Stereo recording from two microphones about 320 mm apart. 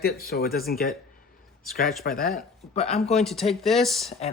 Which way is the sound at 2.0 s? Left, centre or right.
Left.